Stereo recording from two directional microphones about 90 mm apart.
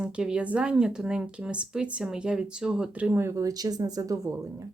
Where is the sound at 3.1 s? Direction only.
30° right (ahead or behind).